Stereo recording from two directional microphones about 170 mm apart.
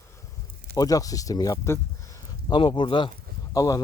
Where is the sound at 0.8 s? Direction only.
20° left (ahead or behind).